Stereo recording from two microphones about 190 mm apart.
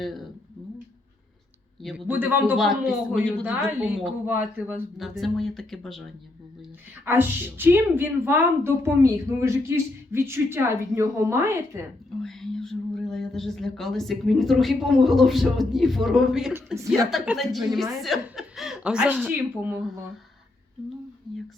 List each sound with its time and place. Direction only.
1.8 s speech: 5° right (ahead or behind)
7.0 s a woman's voice: 10° right (ahead or behind)
12.2 s speech: centre (ahead or behind)
17.1 s speech: centre (ahead or behind)